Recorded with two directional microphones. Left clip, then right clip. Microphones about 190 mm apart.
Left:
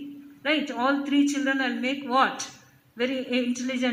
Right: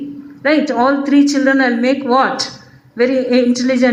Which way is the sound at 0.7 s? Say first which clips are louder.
Right 12 dB; 55° left (ahead or behind).